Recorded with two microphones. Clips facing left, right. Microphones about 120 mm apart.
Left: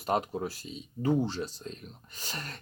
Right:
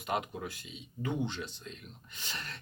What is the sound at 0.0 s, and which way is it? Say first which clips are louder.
Speech: left 5 dB; 35° left (ahead or behind).